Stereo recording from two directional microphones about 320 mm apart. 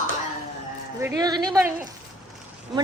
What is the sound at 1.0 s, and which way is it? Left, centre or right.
Speech, centre.